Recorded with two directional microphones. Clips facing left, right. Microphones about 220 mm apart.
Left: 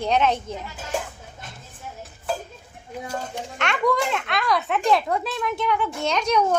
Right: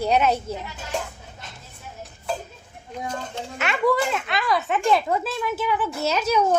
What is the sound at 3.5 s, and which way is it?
Speech, 5° right (ahead or behind).